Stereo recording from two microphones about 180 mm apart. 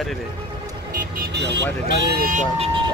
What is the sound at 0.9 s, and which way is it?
Speech, 55° right (ahead or behind).